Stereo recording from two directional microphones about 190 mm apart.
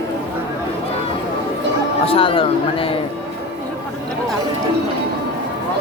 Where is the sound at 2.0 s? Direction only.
30° left (ahead or behind).